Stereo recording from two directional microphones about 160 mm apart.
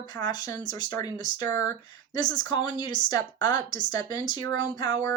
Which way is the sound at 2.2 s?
25° left (ahead or behind).